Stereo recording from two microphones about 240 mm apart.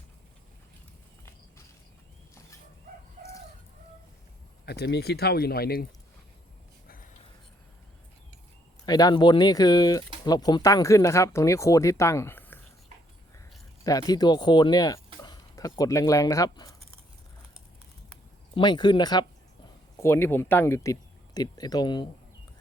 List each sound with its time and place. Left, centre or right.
4.6 s speech: left
6.8 s a sound: left
8.9 s speech: centre
13.8 s speech: centre
18.5 s speech: centre